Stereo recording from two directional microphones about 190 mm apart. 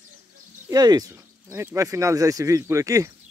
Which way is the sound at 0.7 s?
20° right (ahead or behind).